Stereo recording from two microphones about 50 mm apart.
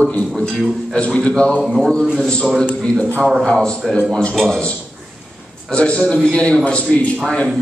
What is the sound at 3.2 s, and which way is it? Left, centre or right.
Speech, centre.